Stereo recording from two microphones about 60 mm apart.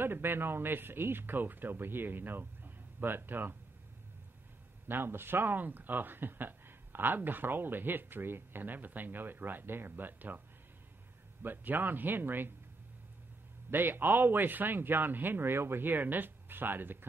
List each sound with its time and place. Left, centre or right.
0.0 s speech: right
4.8 s speech: right
11.4 s speech: right
13.7 s speech: right